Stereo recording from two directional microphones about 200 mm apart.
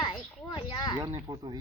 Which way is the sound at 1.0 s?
25° right (ahead or behind).